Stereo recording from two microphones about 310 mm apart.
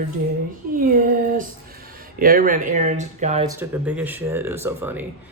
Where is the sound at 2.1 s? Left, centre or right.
Right.